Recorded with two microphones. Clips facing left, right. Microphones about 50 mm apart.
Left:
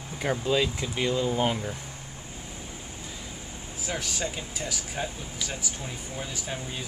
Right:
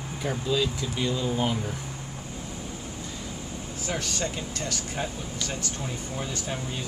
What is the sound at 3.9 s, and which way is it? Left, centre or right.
Speech, centre.